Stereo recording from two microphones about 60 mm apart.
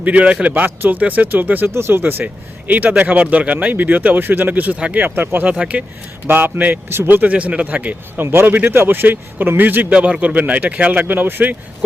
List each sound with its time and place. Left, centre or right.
0.0 s speech: right
1.7 s speech: right
5.0 s speech: right
5.5 s speech: right
6.2 s speech: right
6.8 s speech: right
7.2 s speech: right
8.2 s speech: right